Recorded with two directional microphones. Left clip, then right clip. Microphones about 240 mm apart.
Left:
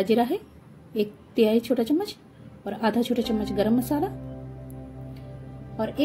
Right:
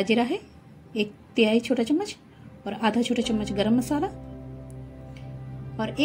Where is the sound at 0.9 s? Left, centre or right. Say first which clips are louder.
Left 1 dB; centre.